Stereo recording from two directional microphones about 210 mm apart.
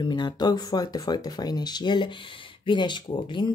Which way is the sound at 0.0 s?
20° left (ahead or behind).